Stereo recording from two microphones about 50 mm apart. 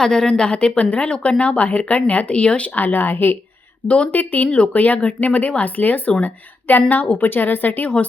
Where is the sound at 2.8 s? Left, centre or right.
Left.